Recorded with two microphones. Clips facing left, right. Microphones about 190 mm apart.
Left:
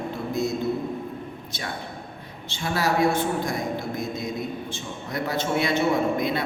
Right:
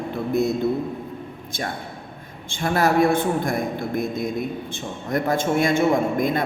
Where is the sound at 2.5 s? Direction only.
50° right (ahead or behind).